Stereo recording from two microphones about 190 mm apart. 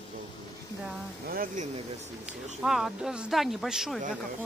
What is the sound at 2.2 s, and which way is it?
Speech, 5° right (ahead or behind).